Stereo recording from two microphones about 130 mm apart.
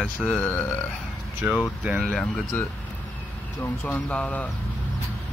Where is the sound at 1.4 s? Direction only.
10° right (ahead or behind).